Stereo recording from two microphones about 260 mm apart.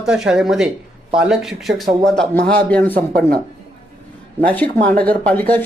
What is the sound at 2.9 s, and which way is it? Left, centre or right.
Speech, right.